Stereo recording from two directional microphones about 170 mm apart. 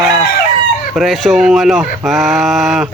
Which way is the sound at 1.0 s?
Centre (ahead or behind).